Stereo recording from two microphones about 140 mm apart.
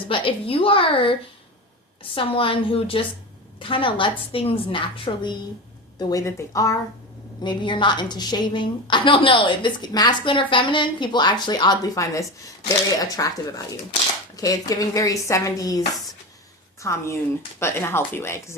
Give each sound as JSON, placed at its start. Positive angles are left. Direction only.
{"t": 0.1, "sound": "a woman's voice", "side_deg": 40}
{"t": 2.1, "sound": "a woman's voice", "side_deg": 40}
{"t": 6.0, "sound": "speech", "side_deg": 25}
{"t": 7.4, "sound": "a woman's voice", "side_deg": 35}
{"t": 16.8, "sound": "speech", "side_deg": 20}